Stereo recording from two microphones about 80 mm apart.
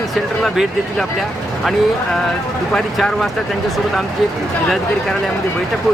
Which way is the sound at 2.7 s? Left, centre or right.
Centre.